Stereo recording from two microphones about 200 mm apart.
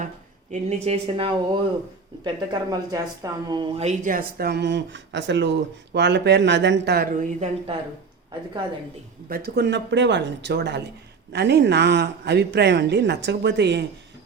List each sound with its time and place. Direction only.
0.5 s speech: 35° right (ahead or behind)
3.8 s speech: 40° right (ahead or behind)
9.3 s speech: 50° right (ahead or behind)